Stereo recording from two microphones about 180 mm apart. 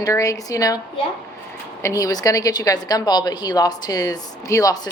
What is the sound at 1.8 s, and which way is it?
A woman's voice, 20° left (ahead or behind).